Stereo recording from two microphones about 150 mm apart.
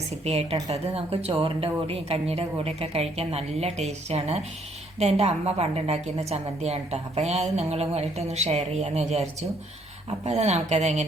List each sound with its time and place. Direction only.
0.7 s a woman's voice: 40° right (ahead or behind)